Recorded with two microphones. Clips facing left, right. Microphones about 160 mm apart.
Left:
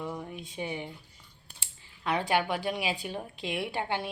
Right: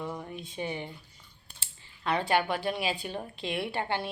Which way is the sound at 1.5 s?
10° left (ahead or behind).